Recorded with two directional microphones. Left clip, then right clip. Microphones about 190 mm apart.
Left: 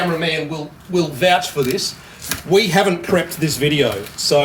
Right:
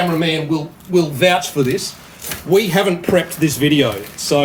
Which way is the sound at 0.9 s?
20° right (ahead or behind).